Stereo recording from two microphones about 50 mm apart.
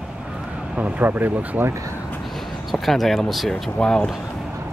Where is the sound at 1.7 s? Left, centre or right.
Right.